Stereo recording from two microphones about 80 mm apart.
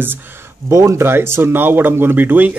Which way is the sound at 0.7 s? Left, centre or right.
Right.